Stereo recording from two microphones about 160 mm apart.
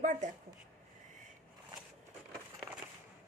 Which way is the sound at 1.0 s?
50° right (ahead or behind).